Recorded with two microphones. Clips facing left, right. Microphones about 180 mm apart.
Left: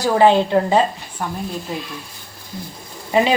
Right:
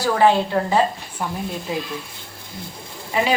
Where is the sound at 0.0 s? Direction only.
20° left (ahead or behind).